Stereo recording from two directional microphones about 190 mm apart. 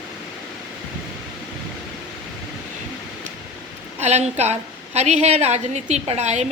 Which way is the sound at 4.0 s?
35° right (ahead or behind).